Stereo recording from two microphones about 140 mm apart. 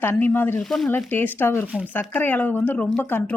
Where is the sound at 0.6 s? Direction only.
Centre (ahead or behind).